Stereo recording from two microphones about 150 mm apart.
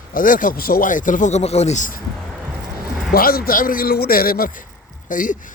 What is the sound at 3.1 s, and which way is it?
Speech, 80° left.